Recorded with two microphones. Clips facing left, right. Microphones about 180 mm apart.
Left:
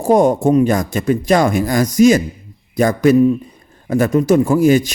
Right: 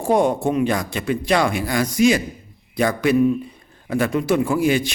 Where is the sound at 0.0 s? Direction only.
45° left (ahead or behind).